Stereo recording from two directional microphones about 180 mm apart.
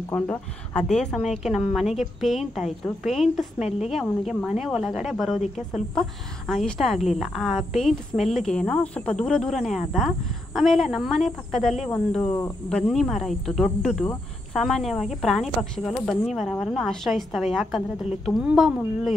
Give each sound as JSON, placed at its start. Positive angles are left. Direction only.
{"t": 0.1, "sound": "speech", "side_deg": 5}